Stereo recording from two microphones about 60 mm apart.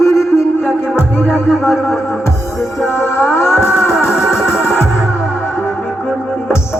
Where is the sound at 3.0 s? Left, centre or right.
Left.